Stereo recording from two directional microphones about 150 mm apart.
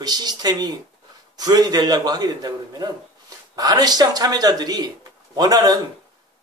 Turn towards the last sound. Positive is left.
turn(degrees=-25)  # may be behind; listen again after turning